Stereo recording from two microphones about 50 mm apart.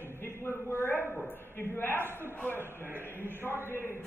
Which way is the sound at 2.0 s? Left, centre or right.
Right.